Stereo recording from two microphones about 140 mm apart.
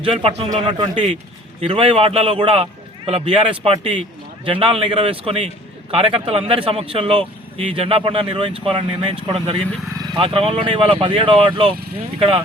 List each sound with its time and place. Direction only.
0.0 s a man's voice: 40° right (ahead or behind)